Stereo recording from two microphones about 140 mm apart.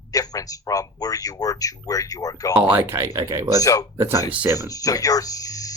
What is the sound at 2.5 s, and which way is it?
Speech, 15° right (ahead or behind).